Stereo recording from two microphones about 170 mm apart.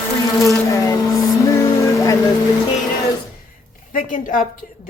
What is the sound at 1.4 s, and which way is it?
Vehicle, 20° left (ahead or behind).